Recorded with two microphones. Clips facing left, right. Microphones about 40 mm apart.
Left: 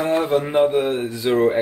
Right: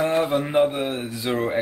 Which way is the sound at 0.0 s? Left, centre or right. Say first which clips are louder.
Left 2 dB; centre.